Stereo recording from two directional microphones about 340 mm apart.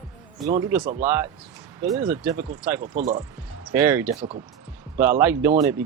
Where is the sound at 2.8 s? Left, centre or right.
Right.